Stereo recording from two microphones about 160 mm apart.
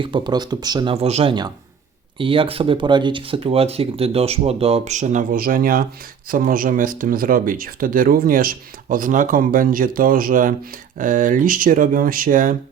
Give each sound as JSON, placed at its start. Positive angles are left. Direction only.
{"t": 0.0, "sound": "speech", "side_deg": -30}
{"t": 0.9, "sound": "speech", "side_deg": -40}